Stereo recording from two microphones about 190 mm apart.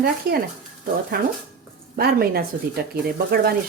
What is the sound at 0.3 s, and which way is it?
Speech, 50° right (ahead or behind).